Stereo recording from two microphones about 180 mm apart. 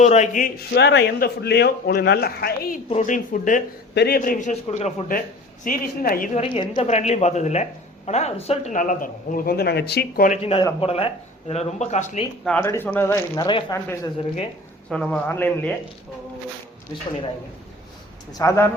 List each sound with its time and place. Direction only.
0.0 s speech: 40° left (ahead or behind)
0.7 s a man's voice: 70° left (ahead or behind)
2.9 s a man's voice: 45° left (ahead or behind)
3.9 s a man's voice: 60° left (ahead or behind)
6.4 s a woman's voice: 30° left (ahead or behind); by 10.2 s 65° left (ahead or behind)
10.2 s speech: 35° left (ahead or behind)
12.5 s speech: 15° left (ahead or behind)
14.8 s a man's voice: 5° left (ahead or behind)
18.3 s speech: 15° left (ahead or behind)